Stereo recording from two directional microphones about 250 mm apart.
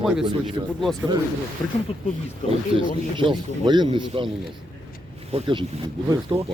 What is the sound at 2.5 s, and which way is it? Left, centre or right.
Speech, right.